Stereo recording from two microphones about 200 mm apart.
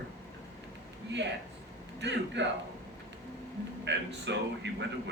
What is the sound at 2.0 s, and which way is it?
Speech, 60° right (ahead or behind).